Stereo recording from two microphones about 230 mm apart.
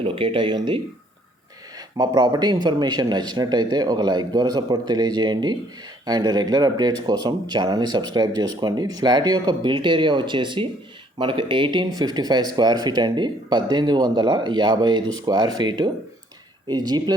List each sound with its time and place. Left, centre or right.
0.0 s speech: right
2.0 s speech: centre